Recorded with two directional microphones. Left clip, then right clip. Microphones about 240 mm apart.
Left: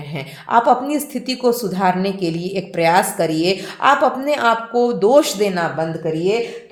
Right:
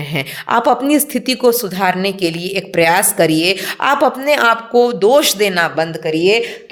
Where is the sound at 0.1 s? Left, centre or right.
Right.